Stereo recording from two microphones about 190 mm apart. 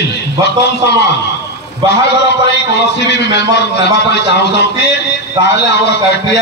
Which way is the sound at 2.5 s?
65° left (ahead or behind).